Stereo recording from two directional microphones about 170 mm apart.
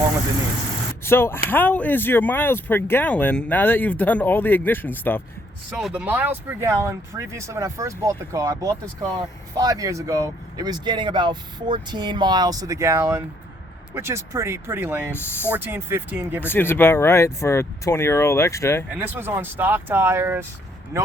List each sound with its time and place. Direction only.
1.0 s speech: 15° left (ahead or behind)
5.7 s speech: 5° right (ahead or behind)
15.1 s speech: 15° left (ahead or behind)
15.4 s speech: 10° right (ahead or behind)
16.4 s speech: 10° left (ahead or behind)
18.9 s speech: 10° right (ahead or behind)